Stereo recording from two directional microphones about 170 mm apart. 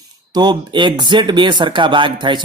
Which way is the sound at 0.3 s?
25° right (ahead or behind).